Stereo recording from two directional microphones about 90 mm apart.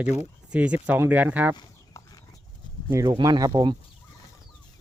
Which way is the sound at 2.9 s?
40° right (ahead or behind).